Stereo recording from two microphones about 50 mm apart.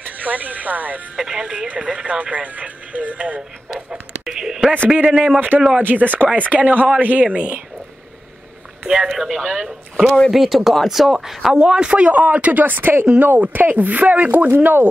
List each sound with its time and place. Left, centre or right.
0.0 s music: right
1.1 s speech: centre
3.3 s a sound: centre
4.8 s speech: right
5.8 s speech: right
7.3 s speech: right
8.8 s speech: centre
9.4 s speech: centre
9.7 s speech: centre
11.6 s speech: centre
14.5 s speech: right